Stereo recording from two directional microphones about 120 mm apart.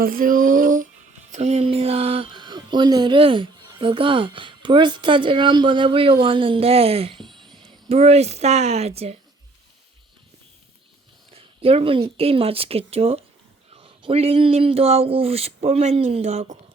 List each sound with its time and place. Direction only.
0.2 s a sound: 90° right
1.3 s speech: 65° right (ahead or behind); by 7.7 s 40° right (ahead or behind)
7.9 s speech: 60° right (ahead or behind)
11.3 s speech: 55° right (ahead or behind)